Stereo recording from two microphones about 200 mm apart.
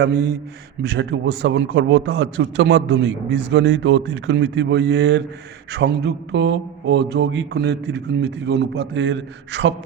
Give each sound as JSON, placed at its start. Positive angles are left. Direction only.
{"t": 0.0, "sound": "a man's voice", "side_deg": -55}